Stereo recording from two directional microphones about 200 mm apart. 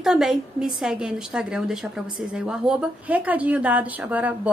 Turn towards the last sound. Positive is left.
turn(degrees=-5)  # may be behind; listen again after turning